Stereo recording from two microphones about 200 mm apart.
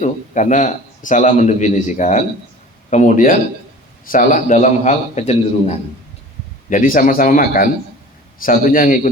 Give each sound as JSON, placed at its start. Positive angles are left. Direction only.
{"t": 0.0, "sound": "a man's voice", "side_deg": 35}